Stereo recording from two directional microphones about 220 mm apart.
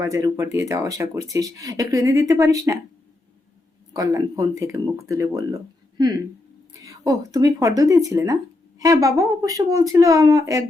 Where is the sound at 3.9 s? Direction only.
15° right (ahead or behind).